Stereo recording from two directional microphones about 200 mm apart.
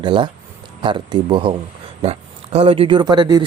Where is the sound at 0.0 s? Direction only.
25° right (ahead or behind).